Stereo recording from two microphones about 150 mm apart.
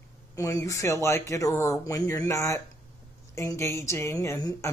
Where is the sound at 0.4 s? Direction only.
20° left (ahead or behind).